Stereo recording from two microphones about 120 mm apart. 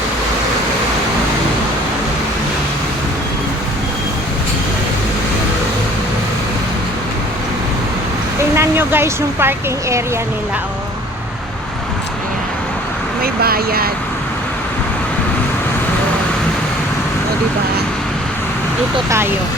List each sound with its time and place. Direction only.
8.5 s speech: 20° right (ahead or behind)